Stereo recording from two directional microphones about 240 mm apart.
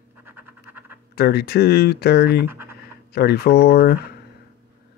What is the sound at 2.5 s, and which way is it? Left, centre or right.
Speech, centre.